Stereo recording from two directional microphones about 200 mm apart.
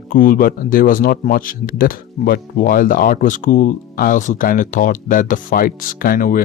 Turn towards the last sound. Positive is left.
turn(degrees=45)  # may be behind; listen again after turning